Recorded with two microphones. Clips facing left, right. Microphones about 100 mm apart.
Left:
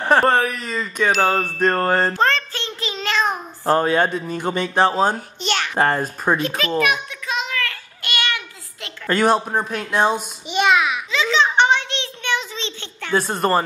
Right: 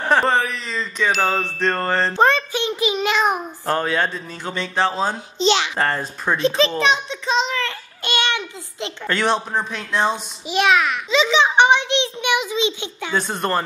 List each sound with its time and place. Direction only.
0.1 s speech: 5° left (ahead or behind)
0.5 s chime: 10° left (ahead or behind)
2.1 s a child's voice: 15° right (ahead or behind)
3.6 s chime: 15° left (ahead or behind)
5.0 s a child's voice: 50° left (ahead or behind)
5.8 s chime: 15° left (ahead or behind)
6.4 s a child's voice: 25° right (ahead or behind)
6.8 s child singing: 25° right (ahead or behind)
9.0 s chime: 5° left (ahead or behind)
10.5 s a child's voice: centre (ahead or behind)
11.1 s a child's voice: 20° right (ahead or behind)
13.1 s a child's voice: centre (ahead or behind)